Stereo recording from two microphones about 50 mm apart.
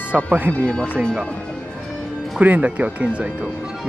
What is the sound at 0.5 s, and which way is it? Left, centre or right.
Speech, left.